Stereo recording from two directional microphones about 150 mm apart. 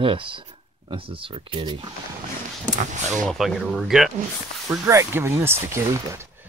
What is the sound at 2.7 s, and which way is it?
Speech, 55° right (ahead or behind).